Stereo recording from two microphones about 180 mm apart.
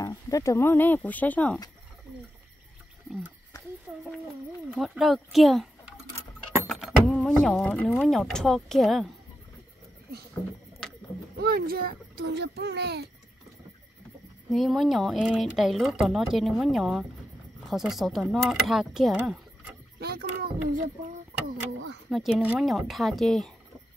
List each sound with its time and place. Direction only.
0.0 s speech: 20° left (ahead or behind)
3.1 s a sound: 10° right (ahead or behind)
4.7 s speech: centre (ahead or behind)
11.3 s a child's voice: 60° right (ahead or behind)
14.5 s speech: centre (ahead or behind)
20.0 s a child's voice: 60° right (ahead or behind)
22.1 s speech: centre (ahead or behind)